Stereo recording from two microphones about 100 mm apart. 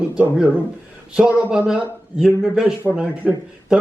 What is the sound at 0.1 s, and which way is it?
Speech, 10° right (ahead or behind).